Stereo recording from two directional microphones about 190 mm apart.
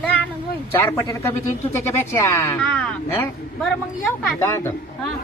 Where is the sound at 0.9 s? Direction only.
15° left (ahead or behind).